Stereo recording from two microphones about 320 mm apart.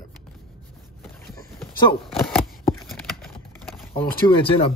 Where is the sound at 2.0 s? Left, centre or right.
Centre.